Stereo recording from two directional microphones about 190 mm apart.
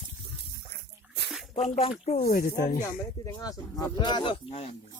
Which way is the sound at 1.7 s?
30° left (ahead or behind).